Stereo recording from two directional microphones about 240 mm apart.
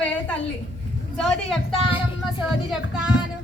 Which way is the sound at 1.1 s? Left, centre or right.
Centre.